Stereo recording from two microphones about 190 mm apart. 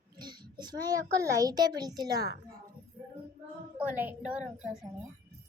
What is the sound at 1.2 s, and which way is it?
A child's voice, 15° right (ahead or behind).